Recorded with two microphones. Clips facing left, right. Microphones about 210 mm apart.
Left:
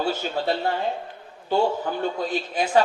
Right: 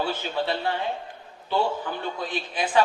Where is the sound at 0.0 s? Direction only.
45° left (ahead or behind).